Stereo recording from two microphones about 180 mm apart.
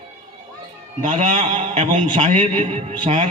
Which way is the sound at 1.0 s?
40° right (ahead or behind).